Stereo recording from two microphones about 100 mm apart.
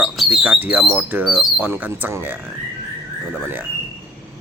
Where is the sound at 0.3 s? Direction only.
15° right (ahead or behind).